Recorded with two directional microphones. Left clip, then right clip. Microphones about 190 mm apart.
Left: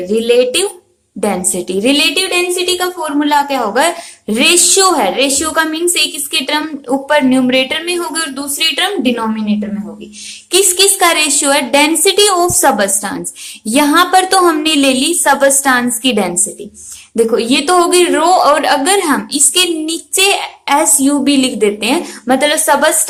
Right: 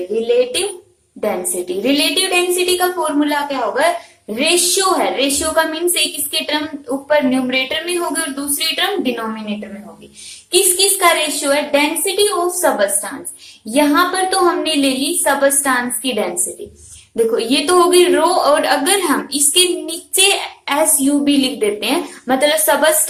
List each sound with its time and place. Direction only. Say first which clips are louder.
0.1 s a woman's voice: left 5 dB; 45° left (ahead or behind)
4.9 s a woman's voice: left 4 dB; 40° left (ahead or behind)
10.5 s a woman's voice: left 4 dB; 40° left (ahead or behind)